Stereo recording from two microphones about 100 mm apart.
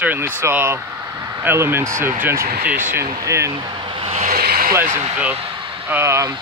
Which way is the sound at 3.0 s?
30° right (ahead or behind).